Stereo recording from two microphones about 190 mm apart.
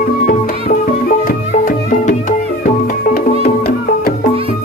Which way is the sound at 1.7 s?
45° left (ahead or behind).